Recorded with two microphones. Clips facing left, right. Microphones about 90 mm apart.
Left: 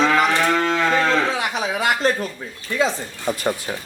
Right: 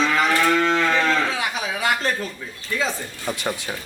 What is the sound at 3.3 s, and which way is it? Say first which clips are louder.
Speech: left 4 dB; 5° left (ahead or behind).